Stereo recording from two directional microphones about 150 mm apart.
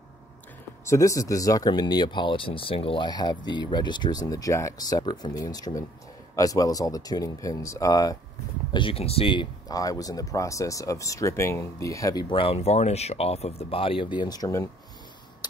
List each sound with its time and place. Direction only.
0.8 s speech: 20° left (ahead or behind)
8.7 s speech: 35° left (ahead or behind)